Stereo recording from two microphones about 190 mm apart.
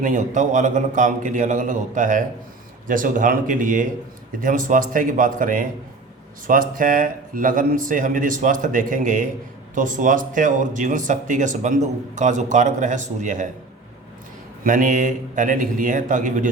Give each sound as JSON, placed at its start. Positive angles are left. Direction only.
{"t": 0.0, "sound": "speech", "side_deg": -40}
{"t": 14.6, "sound": "speech", "side_deg": -45}